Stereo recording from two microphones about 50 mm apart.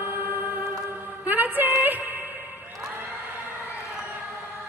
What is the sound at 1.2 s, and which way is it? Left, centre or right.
Music, right.